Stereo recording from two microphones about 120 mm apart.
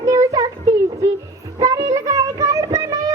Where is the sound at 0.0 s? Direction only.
30° right (ahead or behind).